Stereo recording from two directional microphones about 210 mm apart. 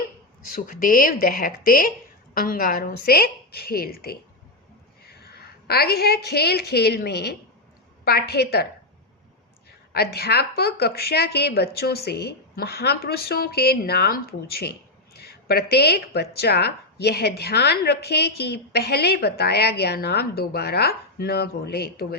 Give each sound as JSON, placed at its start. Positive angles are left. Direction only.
{"t": 0.5, "sound": "a woman's voice", "side_deg": 45}
{"t": 9.6, "sound": "speech", "side_deg": 50}